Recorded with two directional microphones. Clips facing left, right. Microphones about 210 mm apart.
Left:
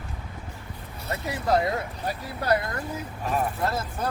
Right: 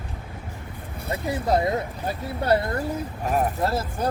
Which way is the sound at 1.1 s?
25° right (ahead or behind).